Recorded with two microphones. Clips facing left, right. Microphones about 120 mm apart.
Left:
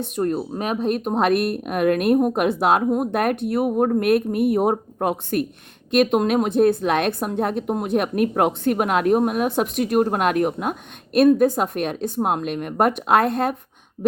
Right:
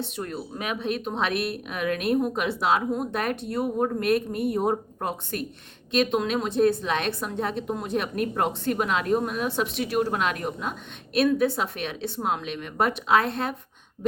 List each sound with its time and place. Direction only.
0.0 s a woman's voice: 45° left (ahead or behind)